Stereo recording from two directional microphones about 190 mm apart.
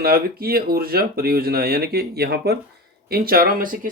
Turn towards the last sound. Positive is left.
turn(degrees=-50)  # may be behind; listen again after turning